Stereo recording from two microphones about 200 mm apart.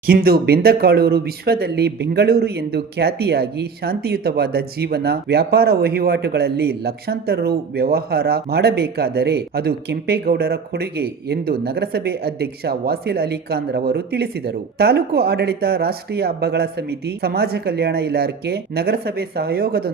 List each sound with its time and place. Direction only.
0.0 s speech: 45° right (ahead or behind)